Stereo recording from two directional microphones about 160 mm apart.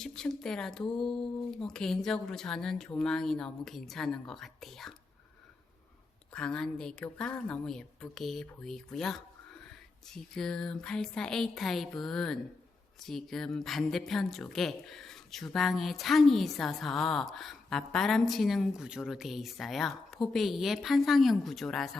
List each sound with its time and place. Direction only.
0.0 s a woman's voice: 5° left (ahead or behind)
6.3 s a woman's voice: 5° left (ahead or behind)